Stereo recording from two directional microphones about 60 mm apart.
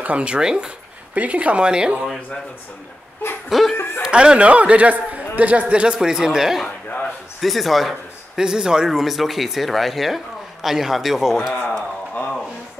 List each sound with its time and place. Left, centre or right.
0.0 s speech: centre
1.1 s speech: right
3.4 s speech: centre
3.7 s snicker: left
4.0 s speech: centre
8.4 s speech: centre